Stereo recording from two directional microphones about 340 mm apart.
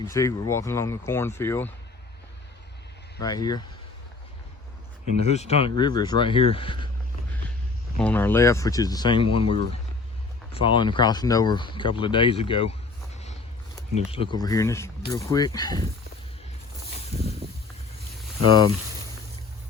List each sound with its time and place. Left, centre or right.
0.1 s speech: centre
3.2 s speech: centre
5.2 s speech: centre
7.9 s speech: centre
14.1 s speech: centre
17.4 s boat: right
18.4 s speech: centre